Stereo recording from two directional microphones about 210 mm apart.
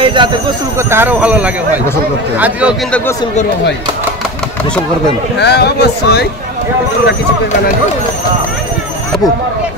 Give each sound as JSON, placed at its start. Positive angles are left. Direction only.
{"t": 0.0, "sound": "speech", "side_deg": -25}
{"t": 0.7, "sound": "a man's voice", "side_deg": -10}
{"t": 5.4, "sound": "speech", "side_deg": 50}